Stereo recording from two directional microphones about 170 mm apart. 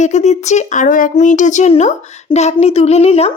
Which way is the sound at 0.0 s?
40° left (ahead or behind).